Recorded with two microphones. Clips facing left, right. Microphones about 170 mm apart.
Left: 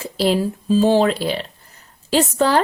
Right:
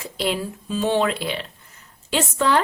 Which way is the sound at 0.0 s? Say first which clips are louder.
Left 7 dB; 35° left (ahead or behind).